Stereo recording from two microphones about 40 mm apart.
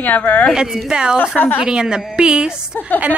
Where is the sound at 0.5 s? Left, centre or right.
Centre.